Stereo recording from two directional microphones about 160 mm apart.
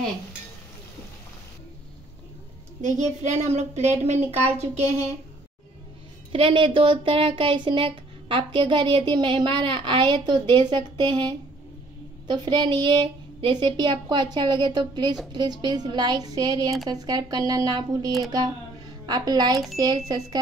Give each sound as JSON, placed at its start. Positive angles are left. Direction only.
{"t": 2.8, "sound": "speech", "side_deg": -50}
{"t": 6.3, "sound": "a woman's voice", "side_deg": -35}